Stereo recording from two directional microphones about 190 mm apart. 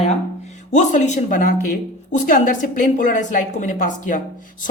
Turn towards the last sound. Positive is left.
turn(degrees=40)  # may be behind; listen again after turning